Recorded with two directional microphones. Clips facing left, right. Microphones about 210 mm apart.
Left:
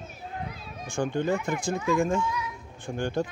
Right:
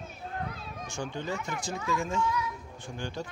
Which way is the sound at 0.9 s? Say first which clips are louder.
Left 9 dB; 55° left (ahead or behind).